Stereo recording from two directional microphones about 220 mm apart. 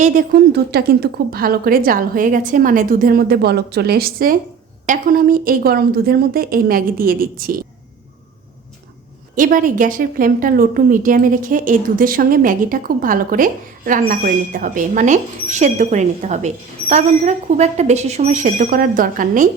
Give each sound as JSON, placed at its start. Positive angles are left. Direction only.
{"t": 0.0, "sound": "a woman's voice", "side_deg": -35}
{"t": 9.3, "sound": "a woman's voice", "side_deg": -40}